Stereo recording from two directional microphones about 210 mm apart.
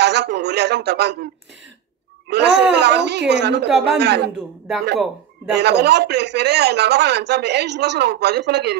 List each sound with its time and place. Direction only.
0.0 s a man's voice: 55° right (ahead or behind)
2.2 s speech: 55° right (ahead or behind)
3.6 s a man's voice: centre (ahead or behind)
4.0 s speech: 50° right (ahead or behind)
5.6 s speech: 50° right (ahead or behind)